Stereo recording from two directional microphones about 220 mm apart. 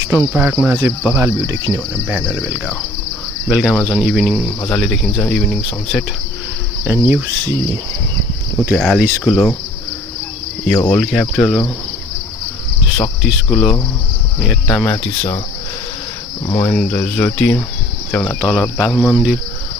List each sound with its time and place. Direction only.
0.1 s speech: 5° right (ahead or behind)
6.8 s cricket: 10° right (ahead or behind)
8.7 s speech: 5° left (ahead or behind)
10.7 s speech: 5° left (ahead or behind)
13.5 s cricket: 10° left (ahead or behind)
16.4 s cricket: 15° left (ahead or behind)
18.4 s speech: 5° left (ahead or behind)